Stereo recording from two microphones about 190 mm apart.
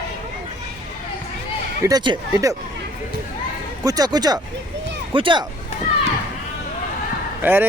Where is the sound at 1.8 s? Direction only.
20° right (ahead or behind).